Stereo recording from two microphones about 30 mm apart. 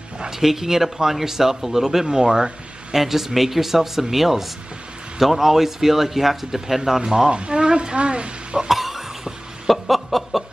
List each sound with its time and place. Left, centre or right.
0.3 s speech: centre
2.0 s speech: right
7.2 s a woman's voice: right
8.6 s cough: centre
9.7 s chuckle: centre